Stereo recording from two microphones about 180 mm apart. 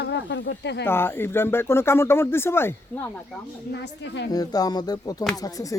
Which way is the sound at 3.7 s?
70° left (ahead or behind).